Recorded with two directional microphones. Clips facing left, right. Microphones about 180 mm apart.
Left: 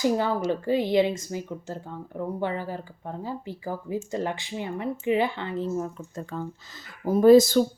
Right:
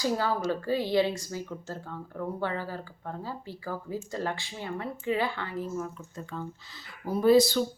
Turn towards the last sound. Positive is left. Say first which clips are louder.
# left 6 dB
turn(degrees=45)  # may be behind; listen again after turning